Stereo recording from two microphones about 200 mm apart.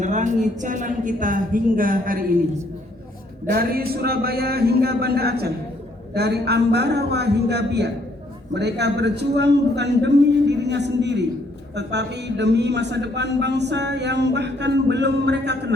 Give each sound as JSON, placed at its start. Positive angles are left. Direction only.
{"t": 0.0, "sound": "a woman's voice", "side_deg": -40}
{"t": 3.4, "sound": "a man's voice", "side_deg": -50}